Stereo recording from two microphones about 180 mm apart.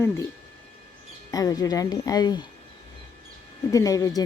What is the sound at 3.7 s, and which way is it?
Speech, 20° left (ahead or behind).